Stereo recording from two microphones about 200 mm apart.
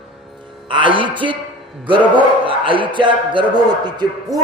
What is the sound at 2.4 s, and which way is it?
Speech, 25° right (ahead or behind).